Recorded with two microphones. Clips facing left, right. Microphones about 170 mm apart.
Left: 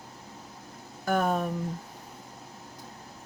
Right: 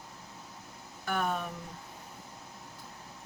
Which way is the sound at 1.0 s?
40° left (ahead or behind).